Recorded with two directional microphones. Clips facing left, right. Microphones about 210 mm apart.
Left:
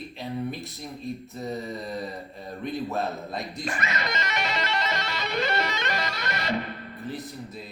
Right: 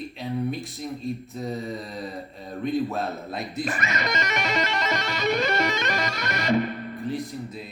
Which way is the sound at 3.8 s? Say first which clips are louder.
Right 3 dB; 45° right (ahead or behind).